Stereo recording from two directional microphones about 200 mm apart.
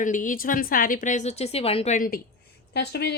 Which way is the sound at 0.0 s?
40° left (ahead or behind).